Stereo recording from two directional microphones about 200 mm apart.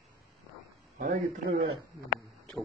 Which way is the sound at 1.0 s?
40° right (ahead or behind).